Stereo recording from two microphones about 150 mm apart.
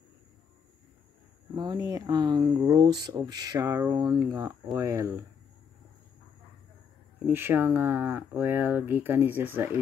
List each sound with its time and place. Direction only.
1.5 s speech: 25° right (ahead or behind)
3.9 s speech: 30° right (ahead or behind)
4.3 s speech: 15° right (ahead or behind)
7.2 s speech: 15° right (ahead or behind)